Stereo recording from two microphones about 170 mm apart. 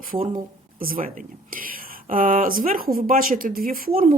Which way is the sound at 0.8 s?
55° right (ahead or behind).